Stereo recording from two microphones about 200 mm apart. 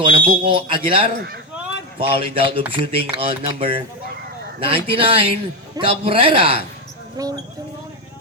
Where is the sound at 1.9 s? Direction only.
25° right (ahead or behind).